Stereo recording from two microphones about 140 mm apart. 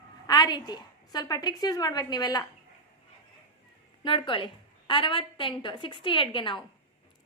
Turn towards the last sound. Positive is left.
turn(degrees=35)  # may be behind; listen again after turning